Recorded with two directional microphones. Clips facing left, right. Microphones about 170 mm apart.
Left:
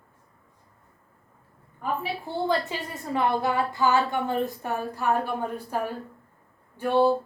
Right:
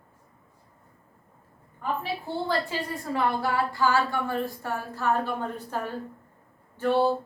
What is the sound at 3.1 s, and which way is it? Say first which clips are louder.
Speech: left 2 dB; 20° left (ahead or behind).